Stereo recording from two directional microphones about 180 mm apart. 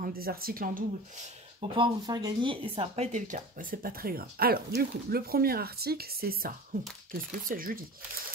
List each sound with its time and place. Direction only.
0.0 s speech: 55° right (ahead or behind)
1.6 s speech: 25° right (ahead or behind); by 7.8 s 50° right (ahead or behind)